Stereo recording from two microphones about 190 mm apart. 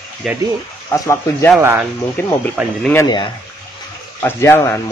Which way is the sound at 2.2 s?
10° left (ahead or behind).